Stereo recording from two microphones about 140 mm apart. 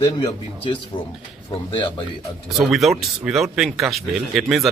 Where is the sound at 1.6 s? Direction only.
35° left (ahead or behind).